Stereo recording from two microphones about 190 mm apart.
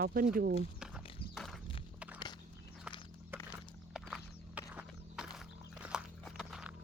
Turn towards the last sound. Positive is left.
turn(degrees=0)  # may be behind; listen again after turning